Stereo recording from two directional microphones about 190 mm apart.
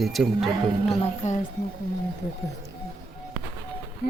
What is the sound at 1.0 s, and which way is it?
Speech, 35° left (ahead or behind).